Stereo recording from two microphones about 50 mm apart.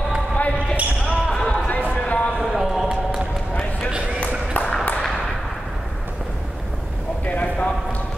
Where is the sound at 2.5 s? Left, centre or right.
Centre.